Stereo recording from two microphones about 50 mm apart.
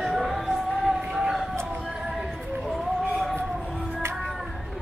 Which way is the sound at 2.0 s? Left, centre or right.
Centre.